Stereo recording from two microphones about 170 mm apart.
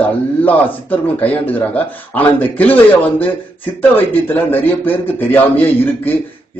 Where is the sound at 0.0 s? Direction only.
10° left (ahead or behind).